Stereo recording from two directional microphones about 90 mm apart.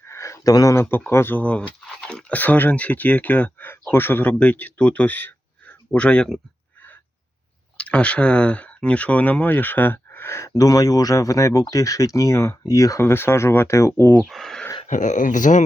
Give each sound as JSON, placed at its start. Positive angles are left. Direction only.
{"t": 0.0, "sound": "a sound", "side_deg": 30}
{"t": 0.8, "sound": "speech", "side_deg": 25}
{"t": 7.8, "sound": "speech", "side_deg": 15}
{"t": 14.3, "sound": "speech", "side_deg": 0}